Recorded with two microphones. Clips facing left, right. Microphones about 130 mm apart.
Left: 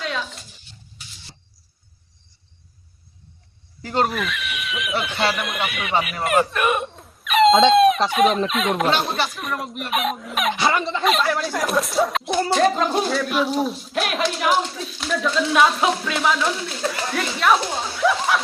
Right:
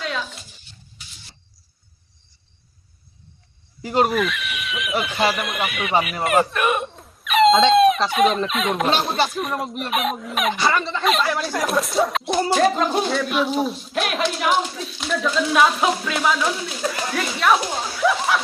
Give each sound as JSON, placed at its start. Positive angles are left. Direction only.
{"t": 0.0, "sound": "a sound", "side_deg": 0}
{"t": 3.8, "sound": "speech", "side_deg": -10}
{"t": 4.1, "sound": "speech", "side_deg": 0}
{"t": 10.5, "sound": "speech", "side_deg": 15}
{"t": 11.0, "sound": "speech", "side_deg": 0}